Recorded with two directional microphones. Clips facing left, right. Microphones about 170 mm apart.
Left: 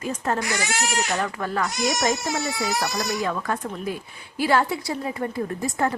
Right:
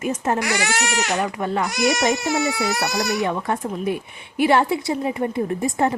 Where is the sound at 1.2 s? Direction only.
20° right (ahead or behind).